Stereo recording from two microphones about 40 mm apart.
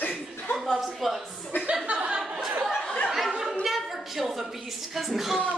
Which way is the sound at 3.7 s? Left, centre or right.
Centre.